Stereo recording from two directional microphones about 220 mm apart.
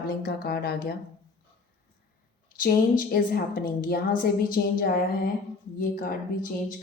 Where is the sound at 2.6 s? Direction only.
40° left (ahead or behind).